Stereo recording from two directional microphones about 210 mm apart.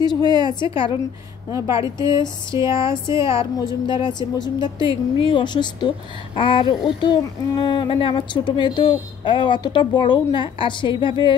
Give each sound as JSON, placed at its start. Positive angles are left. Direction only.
{"t": 0.0, "sound": "a woman's voice", "side_deg": 20}
{"t": 1.5, "sound": "a woman's voice", "side_deg": -15}
{"t": 2.7, "sound": "a woman's voice", "side_deg": 25}